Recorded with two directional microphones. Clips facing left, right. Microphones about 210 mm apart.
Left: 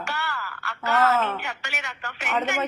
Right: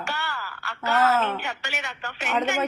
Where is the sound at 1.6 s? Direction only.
30° right (ahead or behind).